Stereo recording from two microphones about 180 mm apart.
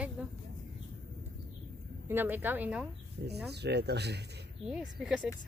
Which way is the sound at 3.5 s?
65° right (ahead or behind).